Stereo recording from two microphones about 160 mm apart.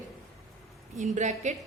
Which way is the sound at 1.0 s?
50° right (ahead or behind).